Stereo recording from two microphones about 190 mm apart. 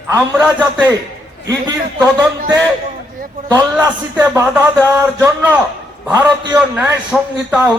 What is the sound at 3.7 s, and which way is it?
Speech, 10° right (ahead or behind).